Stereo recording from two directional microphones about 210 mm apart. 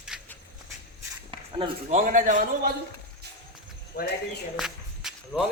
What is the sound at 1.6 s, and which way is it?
A man's voice, 30° right (ahead or behind).